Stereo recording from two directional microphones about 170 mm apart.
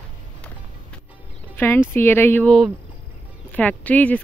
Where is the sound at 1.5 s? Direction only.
15° left (ahead or behind).